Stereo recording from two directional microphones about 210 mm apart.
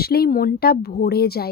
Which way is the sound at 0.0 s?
45° left (ahead or behind).